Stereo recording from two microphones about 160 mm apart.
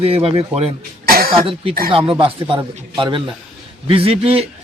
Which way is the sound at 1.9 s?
35° right (ahead or behind).